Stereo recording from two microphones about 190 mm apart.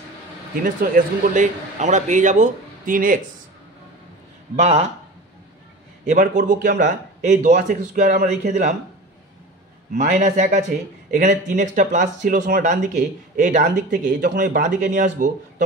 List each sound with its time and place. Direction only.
0.7 s speech: 50° right (ahead or behind)
4.6 s speech: 35° right (ahead or behind)
6.0 s speech: 40° right (ahead or behind)
9.9 s speech: 40° right (ahead or behind)